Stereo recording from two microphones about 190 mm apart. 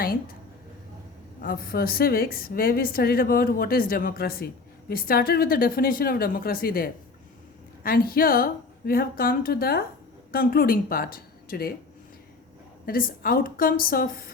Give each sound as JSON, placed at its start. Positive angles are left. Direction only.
{"t": 1.4, "sound": "a woman's voice", "side_deg": 50}
{"t": 12.8, "sound": "a woman's voice", "side_deg": 50}